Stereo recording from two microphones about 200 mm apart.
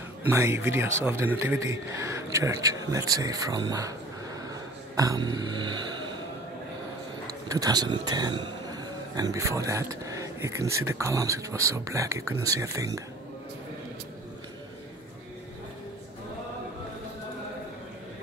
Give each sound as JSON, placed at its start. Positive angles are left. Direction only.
{"t": 0.3, "sound": "speech", "side_deg": -10}
{"t": 4.5, "sound": "a sound", "side_deg": -20}
{"t": 7.4, "sound": "speech", "side_deg": -20}